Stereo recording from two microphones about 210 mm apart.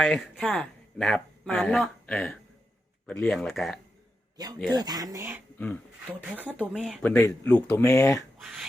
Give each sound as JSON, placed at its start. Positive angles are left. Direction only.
{"t": 0.0, "sound": "speech", "side_deg": 0}
{"t": 4.4, "sound": "speech", "side_deg": -20}
{"t": 5.5, "sound": "speech", "side_deg": 10}
{"t": 6.6, "sound": "speech", "side_deg": -5}
{"t": 7.0, "sound": "speech", "side_deg": 10}
{"t": 8.4, "sound": "speech", "side_deg": 0}